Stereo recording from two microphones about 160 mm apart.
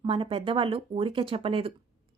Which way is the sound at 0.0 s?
35° right (ahead or behind).